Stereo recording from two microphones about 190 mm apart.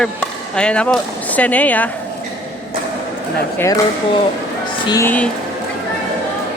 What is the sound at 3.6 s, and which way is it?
Speech, 15° left (ahead or behind).